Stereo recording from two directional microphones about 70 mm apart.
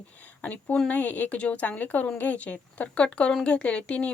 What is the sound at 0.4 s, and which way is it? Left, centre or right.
A woman's voice, left.